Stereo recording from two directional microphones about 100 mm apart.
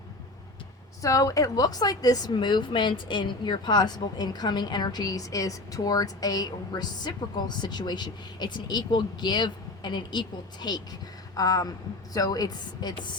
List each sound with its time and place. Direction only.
1.0 s a woman's voice: 35° left (ahead or behind)